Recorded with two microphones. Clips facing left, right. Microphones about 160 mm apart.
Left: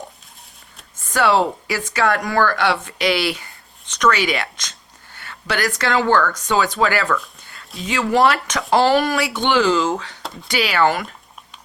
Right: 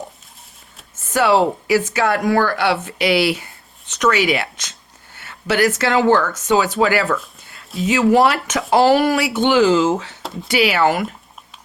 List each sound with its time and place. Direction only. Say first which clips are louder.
1.0 s a woman's voice: right 2 dB; 10° right (ahead or behind)
9.5 s speech: right 3 dB; 25° right (ahead or behind)
10.0 s speech: right 3 dB; 5° right (ahead or behind)